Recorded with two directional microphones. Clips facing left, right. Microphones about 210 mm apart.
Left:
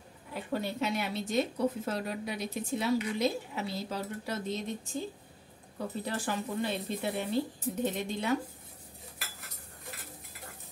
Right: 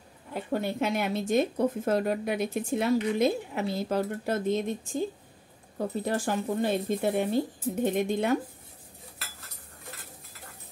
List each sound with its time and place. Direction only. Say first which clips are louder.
0.3 s speech: right 4 dB; 50° right (ahead or behind)
5.8 s speech: right 6 dB; 45° right (ahead or behind)